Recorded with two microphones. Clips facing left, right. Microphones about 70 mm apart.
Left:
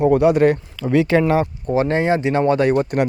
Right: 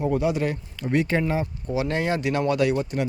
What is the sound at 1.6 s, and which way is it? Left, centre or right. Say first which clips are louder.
Speech: left 6 dB; left.